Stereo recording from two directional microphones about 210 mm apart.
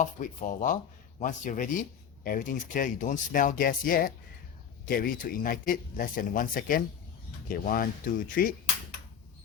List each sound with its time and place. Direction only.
0.0 s speech: 40° left (ahead or behind)